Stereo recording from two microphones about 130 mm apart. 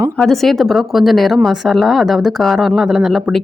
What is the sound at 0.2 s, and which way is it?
Speech, centre (ahead or behind).